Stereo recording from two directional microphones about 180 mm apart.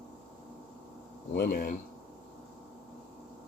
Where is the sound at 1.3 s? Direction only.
50° left (ahead or behind).